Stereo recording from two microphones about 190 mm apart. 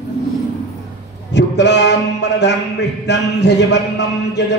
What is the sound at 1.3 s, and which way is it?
Speech, 65° left (ahead or behind).